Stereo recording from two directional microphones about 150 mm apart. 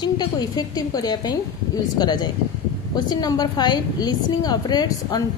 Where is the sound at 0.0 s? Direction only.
30° left (ahead or behind).